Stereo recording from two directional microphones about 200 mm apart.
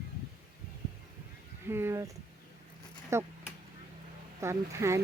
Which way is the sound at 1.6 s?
10° right (ahead or behind).